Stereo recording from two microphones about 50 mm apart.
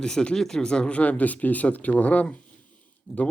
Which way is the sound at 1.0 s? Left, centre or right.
Left.